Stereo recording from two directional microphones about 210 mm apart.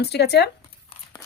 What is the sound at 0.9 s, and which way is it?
Crumpling, 25° left (ahead or behind).